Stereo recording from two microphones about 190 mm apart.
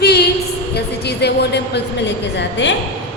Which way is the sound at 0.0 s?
60° left (ahead or behind).